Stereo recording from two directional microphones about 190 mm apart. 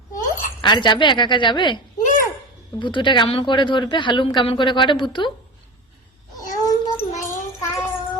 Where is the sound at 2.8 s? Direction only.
25° left (ahead or behind).